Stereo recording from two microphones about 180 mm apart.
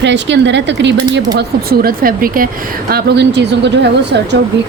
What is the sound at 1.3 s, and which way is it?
A woman's voice, 55° right (ahead or behind).